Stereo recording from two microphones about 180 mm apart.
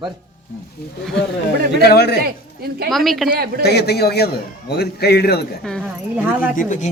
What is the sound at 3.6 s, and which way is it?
A man's voice, 65° left (ahead or behind).